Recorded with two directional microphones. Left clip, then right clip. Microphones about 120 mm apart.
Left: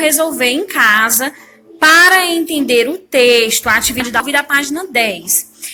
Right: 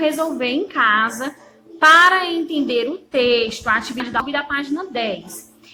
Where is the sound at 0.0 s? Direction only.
30° left (ahead or behind).